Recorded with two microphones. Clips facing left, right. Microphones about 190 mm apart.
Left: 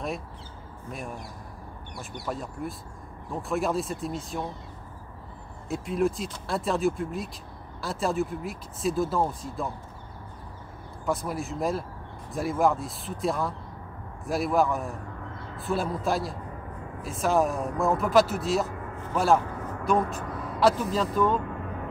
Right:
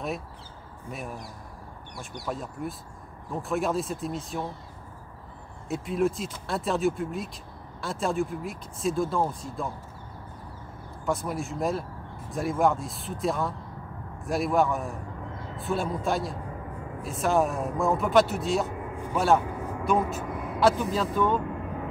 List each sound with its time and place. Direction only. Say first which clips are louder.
2.2 s speech: even; centre (ahead or behind)
5.7 s speech: even; centre (ahead or behind)
11.1 s speech: even; centre (ahead or behind)
19.4 s vehicle: right 1 dB; 10° right (ahead or behind)
20.2 s a sound: right 1 dB; 15° right (ahead or behind)
20.5 s speech: even; centre (ahead or behind)